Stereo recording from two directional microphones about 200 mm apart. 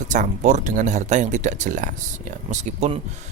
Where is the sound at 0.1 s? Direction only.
35° right (ahead or behind).